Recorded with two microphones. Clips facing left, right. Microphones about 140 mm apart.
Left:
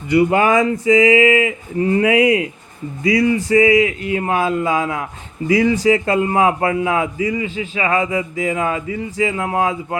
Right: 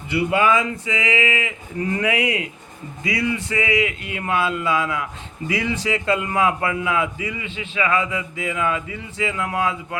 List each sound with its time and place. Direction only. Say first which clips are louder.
0.1 s a man's voice: left 5 dB; 40° left (ahead or behind)